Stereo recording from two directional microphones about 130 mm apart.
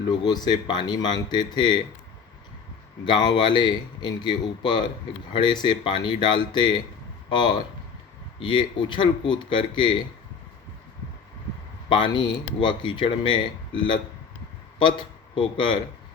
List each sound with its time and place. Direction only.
0.1 s a man's voice: 35° left (ahead or behind)
3.1 s a man's voice: 35° left (ahead or behind)
11.9 s a man's voice: 40° left (ahead or behind)
14.8 s speech: 40° left (ahead or behind)